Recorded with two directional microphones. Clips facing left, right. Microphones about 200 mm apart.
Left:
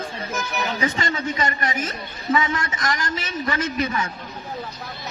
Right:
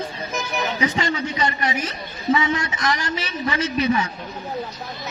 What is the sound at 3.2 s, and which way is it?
Speech, 45° left (ahead or behind).